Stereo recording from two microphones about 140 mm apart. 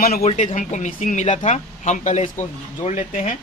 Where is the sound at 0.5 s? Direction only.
65° left (ahead or behind).